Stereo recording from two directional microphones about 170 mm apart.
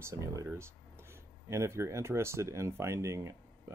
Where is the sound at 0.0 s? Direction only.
20° right (ahead or behind).